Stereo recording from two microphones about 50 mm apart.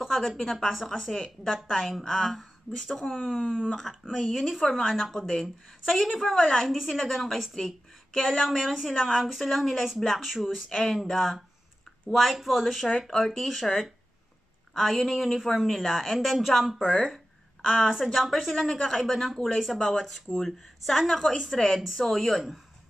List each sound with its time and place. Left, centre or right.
0.4 s speech: centre
1.1 s speech: centre
1.5 s speech: centre
3.3 s a woman's voice: centre
3.8 s speech: centre
6.4 s speech: centre
6.7 s a woman's voice: centre
10.7 s speech: centre
11.1 s speech: centre
13.5 s a woman's voice: centre
18.0 s speech: centre
21.7 s speech: centre